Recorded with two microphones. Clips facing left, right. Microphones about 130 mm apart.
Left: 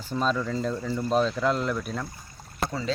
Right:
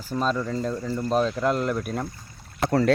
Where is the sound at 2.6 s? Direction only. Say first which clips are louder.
Right 8 dB; 70° right (ahead or behind).